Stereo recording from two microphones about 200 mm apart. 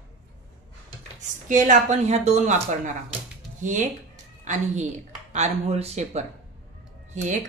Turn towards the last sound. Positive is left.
turn(degrees=-35)  # may be behind; listen again after turning